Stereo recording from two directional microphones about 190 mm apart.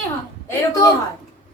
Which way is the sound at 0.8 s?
20° left (ahead or behind).